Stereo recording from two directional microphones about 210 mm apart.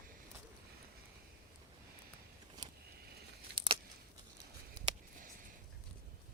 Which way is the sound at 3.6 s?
20° right (ahead or behind).